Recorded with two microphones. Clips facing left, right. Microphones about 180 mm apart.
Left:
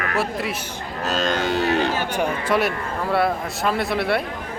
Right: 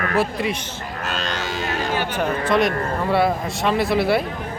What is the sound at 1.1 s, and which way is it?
Music, 45° left (ahead or behind).